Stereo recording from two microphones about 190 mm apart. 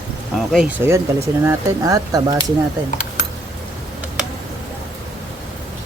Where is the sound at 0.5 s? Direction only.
10° right (ahead or behind).